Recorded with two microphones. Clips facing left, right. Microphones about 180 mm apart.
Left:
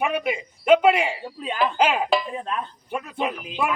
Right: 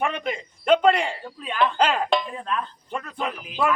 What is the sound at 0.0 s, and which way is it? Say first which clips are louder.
A man's voice: left 2 dB; 10° left (ahead or behind).